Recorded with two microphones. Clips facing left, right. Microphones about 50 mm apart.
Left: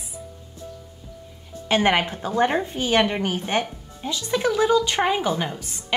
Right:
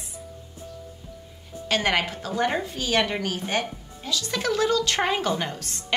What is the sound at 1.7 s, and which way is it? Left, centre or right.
A woman's voice, left.